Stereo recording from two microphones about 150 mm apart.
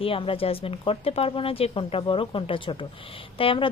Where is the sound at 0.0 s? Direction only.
35° left (ahead or behind).